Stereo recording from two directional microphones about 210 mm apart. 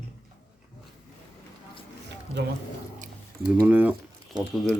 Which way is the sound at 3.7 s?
5° right (ahead or behind).